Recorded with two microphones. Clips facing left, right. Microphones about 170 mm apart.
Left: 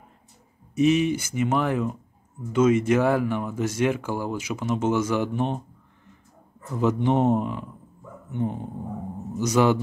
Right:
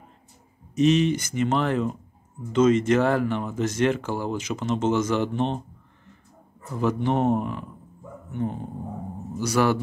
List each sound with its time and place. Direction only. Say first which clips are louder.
0.7 s speech: even; 10° left (ahead or behind)
6.8 s speech: left 2 dB; 20° left (ahead or behind)